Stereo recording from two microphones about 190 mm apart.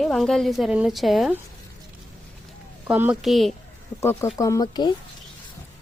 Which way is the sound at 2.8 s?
10° right (ahead or behind).